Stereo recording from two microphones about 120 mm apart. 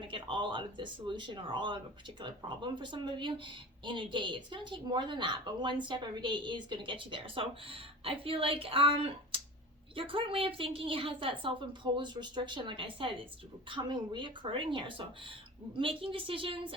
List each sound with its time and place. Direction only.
0.0 s a woman's voice: 45° right (ahead or behind)